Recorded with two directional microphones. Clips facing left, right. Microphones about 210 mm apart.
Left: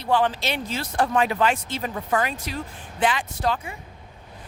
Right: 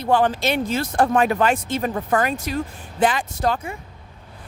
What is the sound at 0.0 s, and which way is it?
Speech, 45° right (ahead or behind).